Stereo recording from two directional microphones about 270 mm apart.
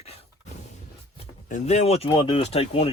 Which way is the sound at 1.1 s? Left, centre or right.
Left.